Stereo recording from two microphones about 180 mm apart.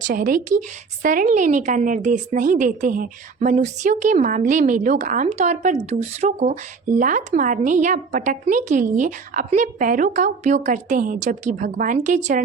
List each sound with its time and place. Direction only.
0.0 s a woman's voice: 50° right (ahead or behind)